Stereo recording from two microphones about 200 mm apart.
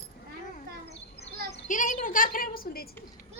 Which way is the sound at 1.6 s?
40° left (ahead or behind).